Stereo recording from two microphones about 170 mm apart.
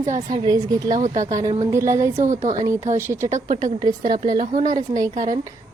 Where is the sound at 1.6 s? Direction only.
15° right (ahead or behind).